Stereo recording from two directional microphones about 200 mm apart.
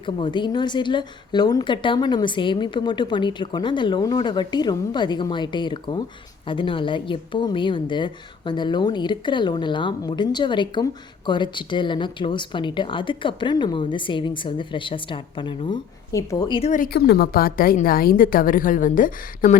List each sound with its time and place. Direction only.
0.0 s a woman's voice: 25° left (ahead or behind); by 19.5 s 40° left (ahead or behind)